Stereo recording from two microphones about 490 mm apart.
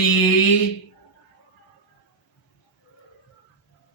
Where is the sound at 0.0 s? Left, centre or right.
Left.